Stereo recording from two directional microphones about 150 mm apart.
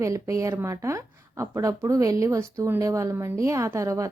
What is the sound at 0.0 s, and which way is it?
Speech, 20° right (ahead or behind).